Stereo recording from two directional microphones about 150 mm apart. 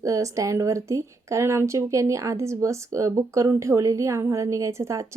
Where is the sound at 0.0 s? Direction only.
20° right (ahead or behind).